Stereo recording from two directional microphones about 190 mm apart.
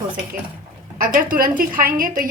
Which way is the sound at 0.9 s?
45° right (ahead or behind).